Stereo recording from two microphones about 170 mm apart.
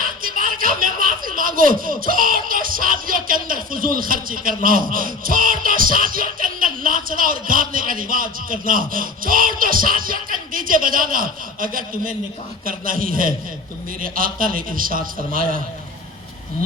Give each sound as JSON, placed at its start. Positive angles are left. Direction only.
{"t": 0.0, "sound": "a sound", "side_deg": -55}
{"t": 4.9, "sound": "music", "side_deg": -55}
{"t": 12.6, "sound": "a man's voice", "side_deg": -55}